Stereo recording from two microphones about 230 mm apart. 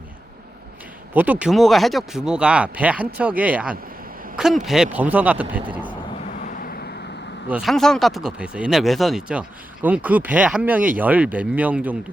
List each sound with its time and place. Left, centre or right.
1.1 s speech: centre
6.4 s vehicle: left
7.4 s speech: centre